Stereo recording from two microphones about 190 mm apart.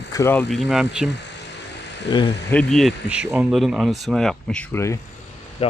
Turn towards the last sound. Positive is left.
turn(degrees=30)  # may be behind; listen again after turning